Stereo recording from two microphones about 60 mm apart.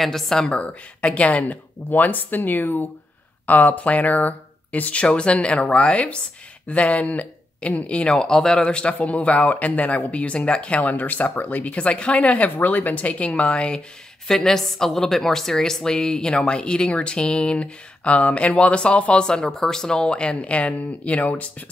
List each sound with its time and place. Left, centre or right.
0.0 s a woman's voice: centre
0.5 s a woman's voice: centre